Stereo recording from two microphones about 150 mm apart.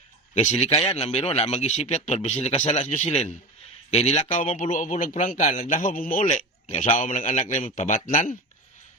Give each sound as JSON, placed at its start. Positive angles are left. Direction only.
{"t": 0.5, "sound": "speech", "side_deg": 30}
{"t": 0.9, "sound": "a man's voice", "side_deg": 45}